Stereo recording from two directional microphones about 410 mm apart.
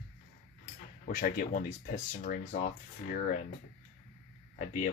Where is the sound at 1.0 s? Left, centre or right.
Centre.